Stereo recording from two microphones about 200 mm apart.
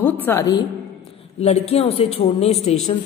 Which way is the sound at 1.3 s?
30° left (ahead or behind).